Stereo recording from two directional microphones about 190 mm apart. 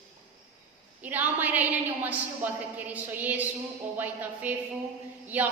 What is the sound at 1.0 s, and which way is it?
A woman's voice, 10° right (ahead or behind).